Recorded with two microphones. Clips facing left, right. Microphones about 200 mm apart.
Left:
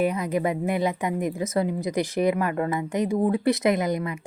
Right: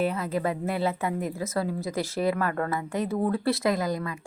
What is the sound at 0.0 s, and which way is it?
Speech, 15° left (ahead or behind).